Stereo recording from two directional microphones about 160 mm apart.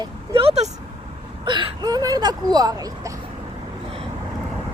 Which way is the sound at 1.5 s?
30° right (ahead or behind).